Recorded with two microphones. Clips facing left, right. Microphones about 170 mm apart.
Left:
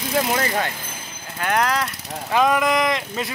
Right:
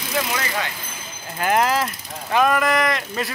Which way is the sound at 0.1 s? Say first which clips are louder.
Left 3 dB; 40° left (ahead or behind).